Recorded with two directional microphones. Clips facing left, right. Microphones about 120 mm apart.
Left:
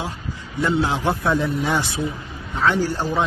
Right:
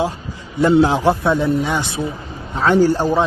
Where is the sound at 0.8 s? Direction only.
35° right (ahead or behind).